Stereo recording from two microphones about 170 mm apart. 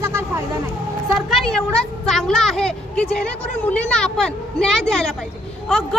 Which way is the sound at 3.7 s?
5° left (ahead or behind).